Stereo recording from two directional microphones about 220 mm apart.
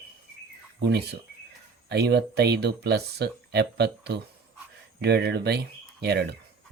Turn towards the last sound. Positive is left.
turn(degrees=-50)  # may be behind; listen again after turning